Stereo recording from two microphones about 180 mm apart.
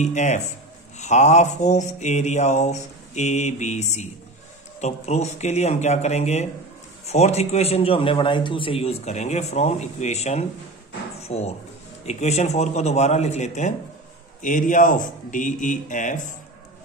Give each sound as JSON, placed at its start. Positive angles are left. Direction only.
{"t": 0.0, "sound": "a man's voice", "side_deg": 40}
{"t": 11.1, "sound": "a sound", "side_deg": 35}
{"t": 12.1, "sound": "a man's voice", "side_deg": 40}